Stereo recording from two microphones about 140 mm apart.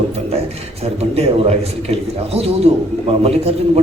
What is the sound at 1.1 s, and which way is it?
A man's voice, 45° right (ahead or behind).